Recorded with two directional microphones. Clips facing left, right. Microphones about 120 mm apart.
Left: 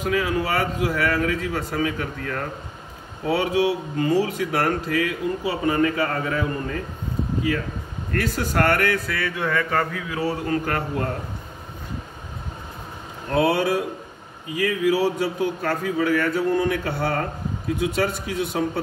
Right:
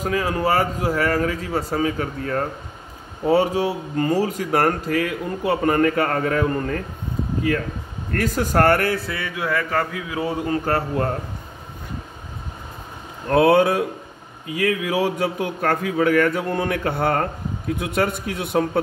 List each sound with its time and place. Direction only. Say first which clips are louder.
0.0 s speech: right 1 dB; 40° right (ahead or behind)
8.2 s speech: right 4 dB; 45° right (ahead or behind); by 9.2 s 30° right (ahead or behind)
9.2 s a sound: even; 5° right (ahead or behind)
10.6 s speech: right 4 dB; 35° right (ahead or behind)
13.3 s speech: right 5 dB; 50° right (ahead or behind)